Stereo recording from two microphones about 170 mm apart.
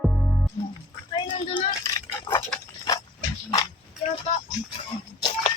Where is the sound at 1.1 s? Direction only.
25° left (ahead or behind).